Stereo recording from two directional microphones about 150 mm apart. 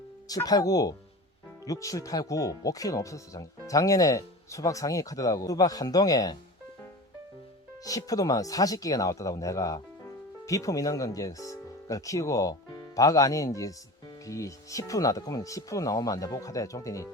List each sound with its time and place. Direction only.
0.3 s speech: 25° left (ahead or behind)
7.9 s speech: 25° left (ahead or behind)